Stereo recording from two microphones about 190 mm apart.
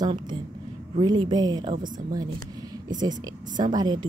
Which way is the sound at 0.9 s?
25° right (ahead or behind).